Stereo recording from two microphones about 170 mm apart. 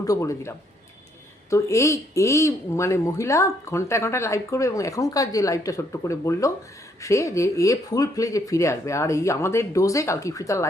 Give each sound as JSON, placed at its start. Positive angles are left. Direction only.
{"t": 0.0, "sound": "speech", "side_deg": 20}